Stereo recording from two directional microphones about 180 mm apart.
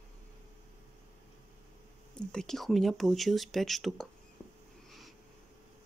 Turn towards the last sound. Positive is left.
turn(degrees=0)  # may be behind; listen again after turning